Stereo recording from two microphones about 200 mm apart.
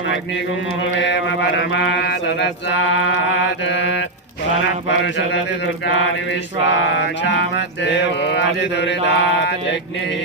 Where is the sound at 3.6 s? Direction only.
60° left (ahead or behind).